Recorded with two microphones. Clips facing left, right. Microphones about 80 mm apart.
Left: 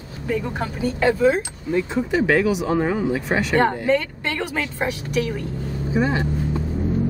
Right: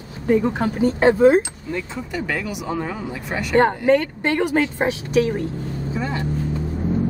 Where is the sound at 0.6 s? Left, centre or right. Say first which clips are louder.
Right 1 dB; right.